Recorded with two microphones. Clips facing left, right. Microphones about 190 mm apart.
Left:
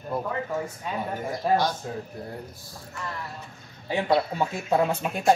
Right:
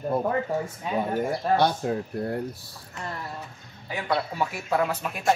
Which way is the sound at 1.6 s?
65° right (ahead or behind).